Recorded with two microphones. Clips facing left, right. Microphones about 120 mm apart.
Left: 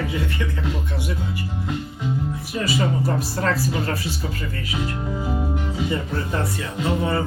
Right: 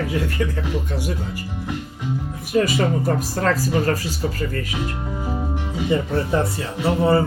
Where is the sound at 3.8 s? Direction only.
40° right (ahead or behind).